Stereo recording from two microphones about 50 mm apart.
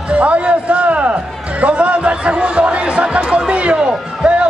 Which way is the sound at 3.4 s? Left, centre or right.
Right.